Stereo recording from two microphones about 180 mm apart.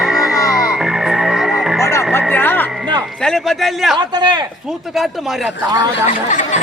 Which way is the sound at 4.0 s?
25° right (ahead or behind).